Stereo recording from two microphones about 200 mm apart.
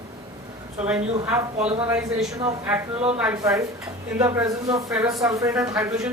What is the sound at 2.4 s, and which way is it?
Speech, 10° right (ahead or behind).